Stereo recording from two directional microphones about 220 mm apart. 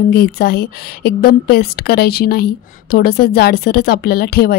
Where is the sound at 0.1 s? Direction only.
45° left (ahead or behind).